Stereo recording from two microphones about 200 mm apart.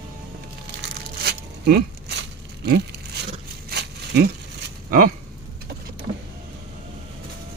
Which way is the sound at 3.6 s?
55° right (ahead or behind).